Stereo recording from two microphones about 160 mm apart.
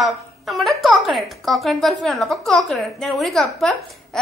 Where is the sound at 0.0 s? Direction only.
Centre (ahead or behind).